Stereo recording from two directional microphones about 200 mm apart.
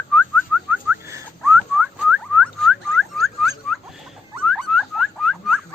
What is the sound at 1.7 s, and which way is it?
Rodents, 5° right (ahead or behind).